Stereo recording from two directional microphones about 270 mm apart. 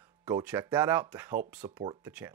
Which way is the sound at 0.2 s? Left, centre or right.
Centre.